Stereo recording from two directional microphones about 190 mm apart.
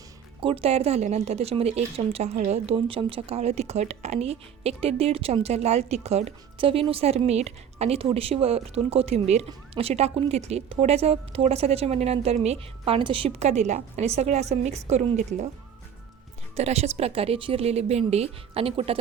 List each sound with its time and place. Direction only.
0.3 s a woman's voice: 30° right (ahead or behind)
16.6 s a woman's voice: 35° right (ahead or behind)